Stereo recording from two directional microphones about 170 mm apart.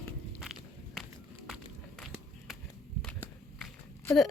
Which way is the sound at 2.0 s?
Centre (ahead or behind).